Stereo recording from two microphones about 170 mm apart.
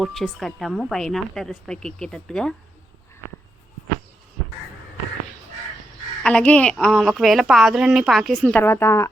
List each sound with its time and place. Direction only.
0.0 s a woman's voice: centre (ahead or behind)
6.2 s a woman's voice: 5° left (ahead or behind)
8.6 s a woman's voice: 15° left (ahead or behind)